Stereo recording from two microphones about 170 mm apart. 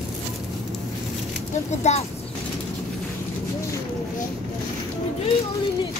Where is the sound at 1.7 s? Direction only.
40° left (ahead or behind).